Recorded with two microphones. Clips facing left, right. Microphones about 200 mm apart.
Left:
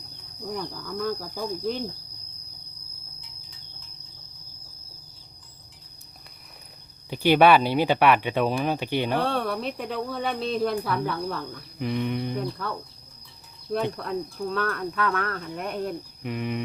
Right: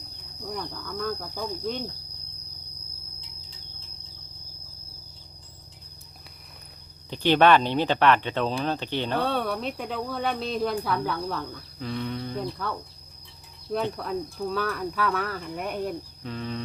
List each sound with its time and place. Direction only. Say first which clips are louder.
0.5 s speech: left 2 dB; 5° left (ahead or behind)
7.1 s speech: left 2 dB; 10° left (ahead or behind)
9.2 s speech: even; centre (ahead or behind)
11.8 s speech: left 4 dB; 15° left (ahead or behind)
13.9 s speech: even; centre (ahead or behind)
16.2 s speech: left 4 dB; 15° left (ahead or behind)